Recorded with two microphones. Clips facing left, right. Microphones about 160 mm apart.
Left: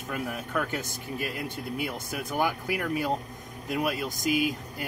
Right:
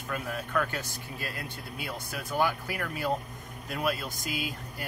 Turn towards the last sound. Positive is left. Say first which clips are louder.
# left 8 dB
turn(degrees=20)  # may be behind; listen again after turning